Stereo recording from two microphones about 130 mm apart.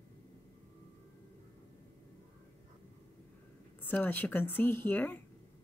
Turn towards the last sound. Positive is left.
turn(degrees=15)  # may be behind; listen again after turning